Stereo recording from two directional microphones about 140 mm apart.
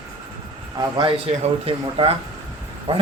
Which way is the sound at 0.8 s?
35° right (ahead or behind).